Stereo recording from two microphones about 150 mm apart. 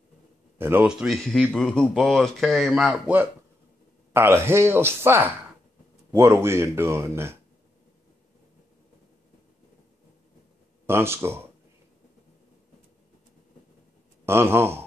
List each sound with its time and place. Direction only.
0.6 s speech: 15° right (ahead or behind)
0.9 s speech: centre (ahead or behind); by 7.3 s 15° right (ahead or behind)
10.9 s speech: 15° right (ahead or behind)
14.2 s speech: 15° right (ahead or behind)